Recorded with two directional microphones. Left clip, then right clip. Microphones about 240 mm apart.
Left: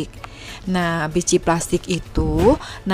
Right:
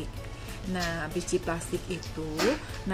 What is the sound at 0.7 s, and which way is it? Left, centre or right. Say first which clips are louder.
Speech: left 11 dB; left.